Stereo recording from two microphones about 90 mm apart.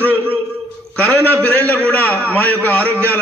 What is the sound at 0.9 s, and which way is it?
A man's voice, 15° left (ahead or behind).